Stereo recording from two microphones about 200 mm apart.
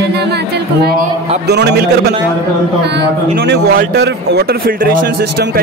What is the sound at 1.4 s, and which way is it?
Speech, 55° right (ahead or behind).